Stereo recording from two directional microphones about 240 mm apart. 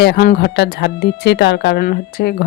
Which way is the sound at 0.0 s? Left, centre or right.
Left.